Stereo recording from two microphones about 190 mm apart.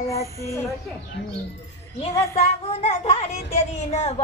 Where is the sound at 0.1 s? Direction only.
15° left (ahead or behind).